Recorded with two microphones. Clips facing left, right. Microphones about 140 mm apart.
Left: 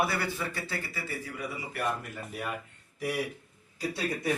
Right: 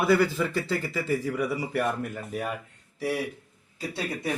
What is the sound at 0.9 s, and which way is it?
Speech, 90° right.